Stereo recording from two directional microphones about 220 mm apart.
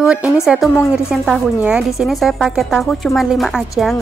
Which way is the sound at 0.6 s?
Centre (ahead or behind).